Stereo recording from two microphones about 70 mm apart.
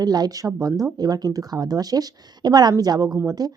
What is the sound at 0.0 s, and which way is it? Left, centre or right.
A woman's voice, right.